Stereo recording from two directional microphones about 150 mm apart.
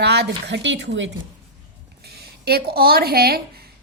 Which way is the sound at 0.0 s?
90° right.